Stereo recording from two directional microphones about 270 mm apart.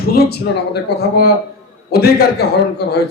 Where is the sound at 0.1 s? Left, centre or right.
Left.